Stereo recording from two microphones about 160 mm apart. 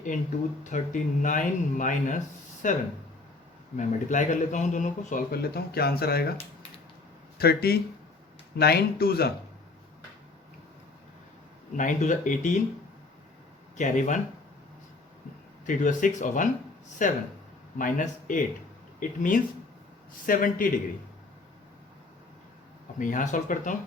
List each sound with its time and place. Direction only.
0.6 s speech: 50° left (ahead or behind)
3.8 s speech: 50° left (ahead or behind)
5.3 s speech: 75° left (ahead or behind)
7.3 s speech: 75° left (ahead or behind)
11.8 s speech: 50° left (ahead or behind)
13.7 s speech: 50° left (ahead or behind)
15.6 s speech: 55° left (ahead or behind)
23.0 s speech: 55° left (ahead or behind)